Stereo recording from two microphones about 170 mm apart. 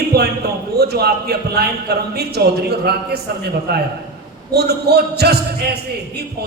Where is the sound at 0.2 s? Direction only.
70° right (ahead or behind).